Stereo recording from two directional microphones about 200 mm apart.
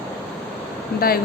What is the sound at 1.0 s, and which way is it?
Speech, 50° left (ahead or behind).